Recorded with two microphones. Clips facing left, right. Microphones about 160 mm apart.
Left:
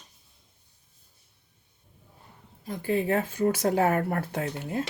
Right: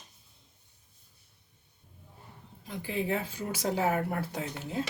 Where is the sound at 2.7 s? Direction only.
50° left (ahead or behind).